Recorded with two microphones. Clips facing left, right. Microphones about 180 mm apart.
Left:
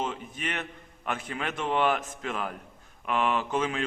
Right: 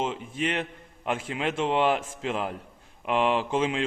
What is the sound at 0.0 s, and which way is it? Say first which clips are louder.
A man's voice: right 4 dB; 25° right (ahead or behind).